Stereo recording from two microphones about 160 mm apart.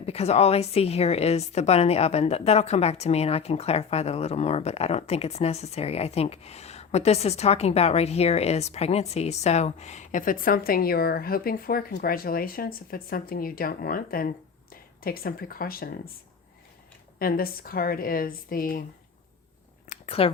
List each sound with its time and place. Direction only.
0.0 s a woman's voice: 40° left (ahead or behind); by 16.0 s 65° left (ahead or behind)
17.2 s speech: 65° left (ahead or behind)
19.9 s a sound: 40° left (ahead or behind)